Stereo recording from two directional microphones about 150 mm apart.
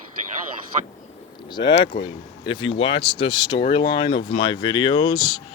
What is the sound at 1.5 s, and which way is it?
Speech, 30° left (ahead or behind).